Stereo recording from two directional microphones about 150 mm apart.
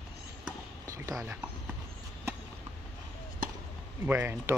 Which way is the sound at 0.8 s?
20° right (ahead or behind).